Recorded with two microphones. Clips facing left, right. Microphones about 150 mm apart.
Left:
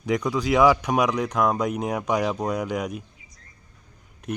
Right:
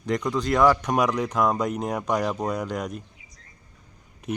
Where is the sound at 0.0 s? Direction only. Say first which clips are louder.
Left 1 dB; 5° left (ahead or behind).